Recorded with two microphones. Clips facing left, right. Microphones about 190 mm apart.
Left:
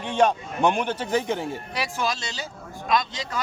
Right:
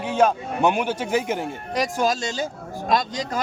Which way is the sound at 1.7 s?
45° right (ahead or behind).